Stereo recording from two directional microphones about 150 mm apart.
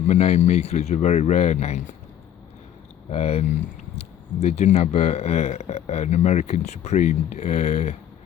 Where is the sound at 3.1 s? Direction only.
45° left (ahead or behind).